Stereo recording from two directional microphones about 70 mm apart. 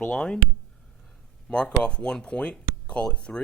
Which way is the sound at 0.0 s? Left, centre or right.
Centre.